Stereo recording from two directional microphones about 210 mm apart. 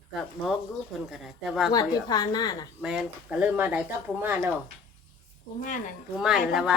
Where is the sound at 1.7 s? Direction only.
20° left (ahead or behind).